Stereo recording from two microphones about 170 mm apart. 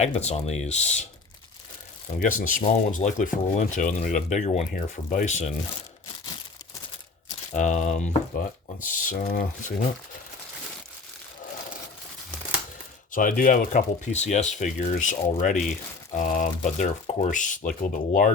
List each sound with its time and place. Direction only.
0.0 s speech: 40° left (ahead or behind)
2.1 s speech: 50° left (ahead or behind)
7.5 s speech: 45° left (ahead or behind)
13.1 s speech: 55° left (ahead or behind)